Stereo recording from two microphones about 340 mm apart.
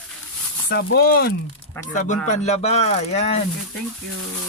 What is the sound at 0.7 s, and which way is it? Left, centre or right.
Speech, left.